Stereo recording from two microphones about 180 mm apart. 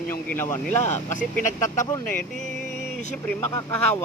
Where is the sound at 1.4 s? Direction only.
45° left (ahead or behind).